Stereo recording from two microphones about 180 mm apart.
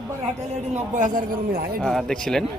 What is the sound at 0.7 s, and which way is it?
Speech, 45° right (ahead or behind).